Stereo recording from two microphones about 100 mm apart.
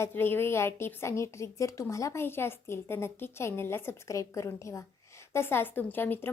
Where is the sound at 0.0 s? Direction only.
20° left (ahead or behind).